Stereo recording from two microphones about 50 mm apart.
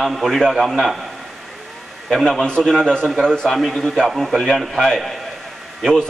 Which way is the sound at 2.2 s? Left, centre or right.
Centre.